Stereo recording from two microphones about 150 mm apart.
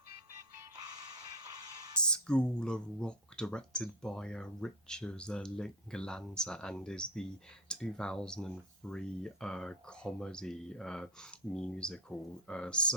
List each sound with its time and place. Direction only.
0.3 s music: 25° right (ahead or behind)
2.0 s speech: 5° left (ahead or behind)